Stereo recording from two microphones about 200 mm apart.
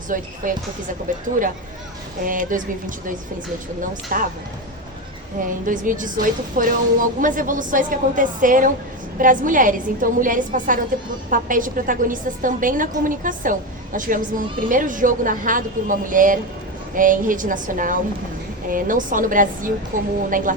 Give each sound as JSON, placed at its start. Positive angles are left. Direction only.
{"t": 0.1, "sound": "a woman's voice", "side_deg": -40}
{"t": 3.8, "sound": "a woman's voice", "side_deg": -40}
{"t": 5.4, "sound": "a woman's voice", "side_deg": -40}